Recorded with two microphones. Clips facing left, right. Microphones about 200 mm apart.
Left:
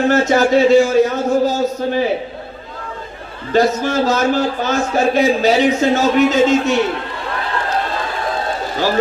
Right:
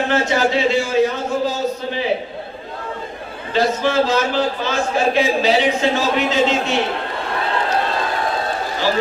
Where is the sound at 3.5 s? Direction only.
45° left (ahead or behind).